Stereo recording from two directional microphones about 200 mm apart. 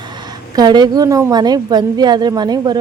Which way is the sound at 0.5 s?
20° right (ahead or behind).